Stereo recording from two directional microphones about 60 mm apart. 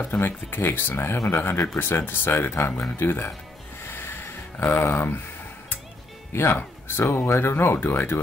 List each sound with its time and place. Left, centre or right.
0.0 s speech: left
4.7 s speech: left
6.3 s speech: left